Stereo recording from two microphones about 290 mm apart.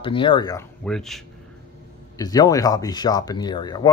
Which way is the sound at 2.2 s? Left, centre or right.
Centre.